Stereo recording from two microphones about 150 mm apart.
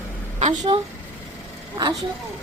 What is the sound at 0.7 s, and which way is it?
Speech, 35° right (ahead or behind).